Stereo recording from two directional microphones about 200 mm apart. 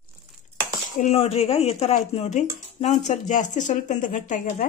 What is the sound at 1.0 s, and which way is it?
Speech, 30° left (ahead or behind).